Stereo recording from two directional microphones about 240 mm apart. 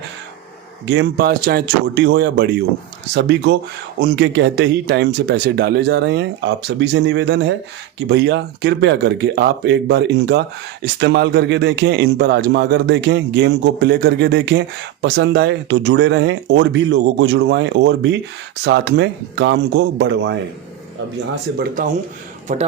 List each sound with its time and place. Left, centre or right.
0.9 s a man's voice: right
22.5 s speech: right